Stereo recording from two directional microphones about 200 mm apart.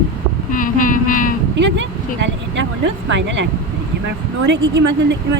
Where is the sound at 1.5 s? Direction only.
65° right (ahead or behind).